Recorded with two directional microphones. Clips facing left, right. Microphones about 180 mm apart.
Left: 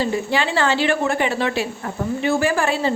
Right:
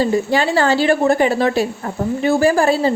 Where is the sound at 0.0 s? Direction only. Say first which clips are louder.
Right 5 dB; 40° right (ahead or behind).